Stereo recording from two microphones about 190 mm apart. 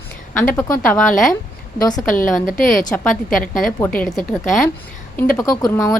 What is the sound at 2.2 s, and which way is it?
Speech, 45° left (ahead or behind).